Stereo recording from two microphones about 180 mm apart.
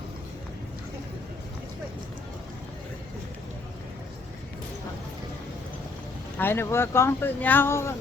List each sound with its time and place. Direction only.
6.3 s speech: 10° left (ahead or behind)